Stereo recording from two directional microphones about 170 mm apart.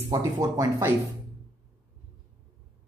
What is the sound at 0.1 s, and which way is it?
Speech, 20° right (ahead or behind).